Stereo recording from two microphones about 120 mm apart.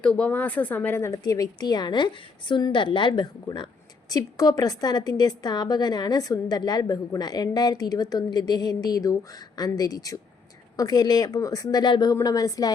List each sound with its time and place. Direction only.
0.0 s a woman's voice: 10° left (ahead or behind); by 12.7 s 30° left (ahead or behind)